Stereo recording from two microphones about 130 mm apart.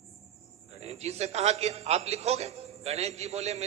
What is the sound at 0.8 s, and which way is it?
A man's voice, 55° right (ahead or behind).